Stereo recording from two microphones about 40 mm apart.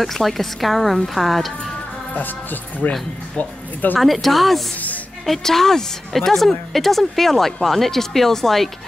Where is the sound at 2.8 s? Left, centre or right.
Left.